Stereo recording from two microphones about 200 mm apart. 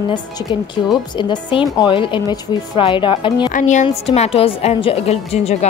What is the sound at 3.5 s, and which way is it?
A woman's voice, 35° left (ahead or behind).